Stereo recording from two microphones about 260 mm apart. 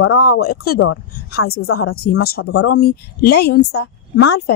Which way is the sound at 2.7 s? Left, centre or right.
Left.